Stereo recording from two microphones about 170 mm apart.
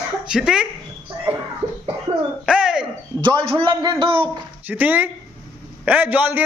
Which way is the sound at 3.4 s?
30° right (ahead or behind).